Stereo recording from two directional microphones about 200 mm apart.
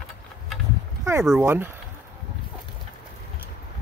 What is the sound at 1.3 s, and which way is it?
Speech, 5° right (ahead or behind).